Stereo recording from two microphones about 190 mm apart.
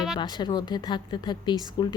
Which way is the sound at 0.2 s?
25° left (ahead or behind).